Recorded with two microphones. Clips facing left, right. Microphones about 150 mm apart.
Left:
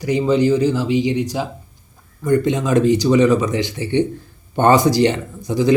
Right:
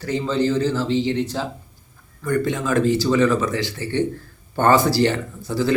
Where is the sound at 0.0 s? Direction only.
15° left (ahead or behind).